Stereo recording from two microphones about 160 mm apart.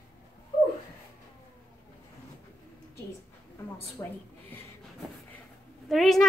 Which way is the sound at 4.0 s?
15° left (ahead or behind).